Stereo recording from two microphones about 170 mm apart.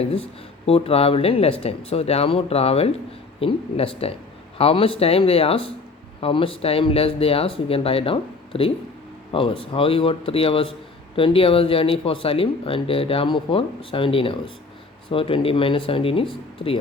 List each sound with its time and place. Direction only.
0.0 s speech: 35° left (ahead or behind)